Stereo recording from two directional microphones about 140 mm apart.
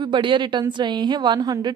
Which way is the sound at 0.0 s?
35° right (ahead or behind).